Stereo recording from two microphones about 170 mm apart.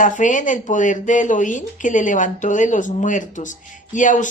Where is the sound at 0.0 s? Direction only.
50° left (ahead or behind).